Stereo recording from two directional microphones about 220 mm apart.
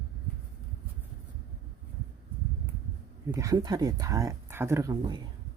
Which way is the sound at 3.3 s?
15° right (ahead or behind).